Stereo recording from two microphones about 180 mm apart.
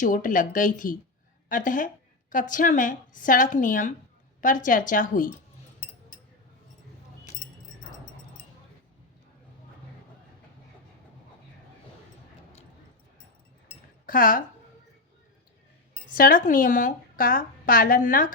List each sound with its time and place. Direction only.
0.0 s a woman's voice: 45° left (ahead or behind)
13.7 s a sound: 30° left (ahead or behind)
14.1 s a woman's voice: 50° left (ahead or behind)
16.1 s a woman's voice: 50° left (ahead or behind)